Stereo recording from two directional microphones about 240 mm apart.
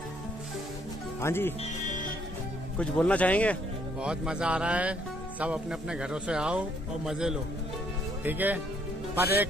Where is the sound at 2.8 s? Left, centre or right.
Centre.